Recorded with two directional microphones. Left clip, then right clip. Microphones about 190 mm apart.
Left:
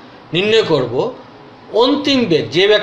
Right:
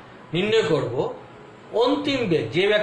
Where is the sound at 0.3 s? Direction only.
35° left (ahead or behind).